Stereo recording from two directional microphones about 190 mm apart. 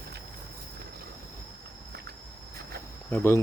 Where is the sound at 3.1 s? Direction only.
10° left (ahead or behind).